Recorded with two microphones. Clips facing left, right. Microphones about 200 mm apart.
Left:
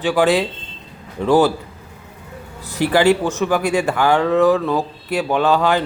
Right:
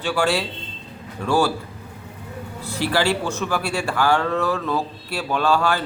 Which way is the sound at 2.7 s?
15° left (ahead or behind).